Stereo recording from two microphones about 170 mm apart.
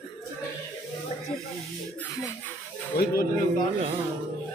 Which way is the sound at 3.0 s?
70° left (ahead or behind).